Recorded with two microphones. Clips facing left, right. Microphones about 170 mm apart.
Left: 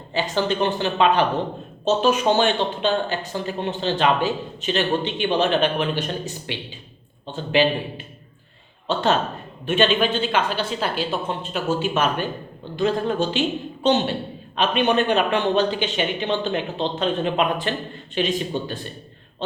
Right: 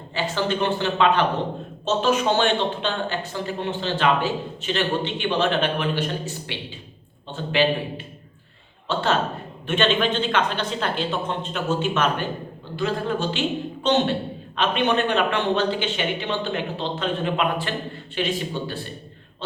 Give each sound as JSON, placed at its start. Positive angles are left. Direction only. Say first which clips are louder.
{"t": 0.2, "sound": "a man's voice", "louder": "left 2 dB", "side_deg": 15}
{"t": 14.5, "sound": "a man's voice", "louder": "left 2 dB", "side_deg": 15}